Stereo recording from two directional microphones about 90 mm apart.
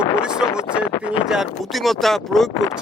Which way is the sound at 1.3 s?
5° right (ahead or behind).